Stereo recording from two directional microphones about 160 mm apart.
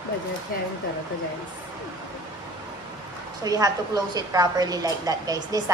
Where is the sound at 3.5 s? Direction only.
25° right (ahead or behind).